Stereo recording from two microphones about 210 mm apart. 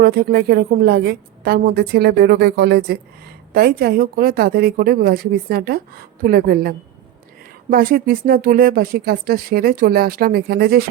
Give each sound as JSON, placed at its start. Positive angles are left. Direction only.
{"t": 0.0, "sound": "a woman's voice", "side_deg": -45}